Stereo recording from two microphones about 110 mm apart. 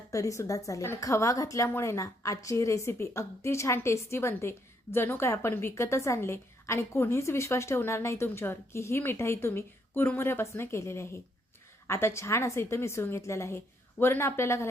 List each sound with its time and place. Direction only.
0.1 s a woman's voice: 30° left (ahead or behind)